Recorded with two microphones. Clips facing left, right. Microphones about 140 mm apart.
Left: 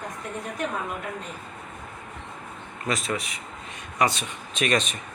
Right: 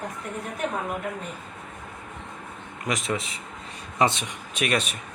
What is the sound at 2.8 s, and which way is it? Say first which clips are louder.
Speech: even; 20° right (ahead or behind).